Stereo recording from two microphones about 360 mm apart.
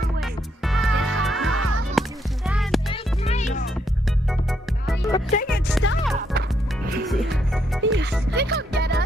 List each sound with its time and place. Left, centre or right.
0.7 s music: centre
1.5 s music: right
2.0 s music: centre
2.9 s music: centre
5.1 s music: centre
5.5 s music: centre
7.1 s music: centre
7.8 s music: right